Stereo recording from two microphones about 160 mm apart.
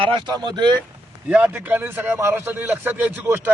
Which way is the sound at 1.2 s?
10° right (ahead or behind).